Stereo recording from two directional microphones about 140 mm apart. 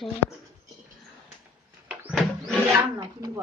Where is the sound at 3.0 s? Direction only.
25° right (ahead or behind).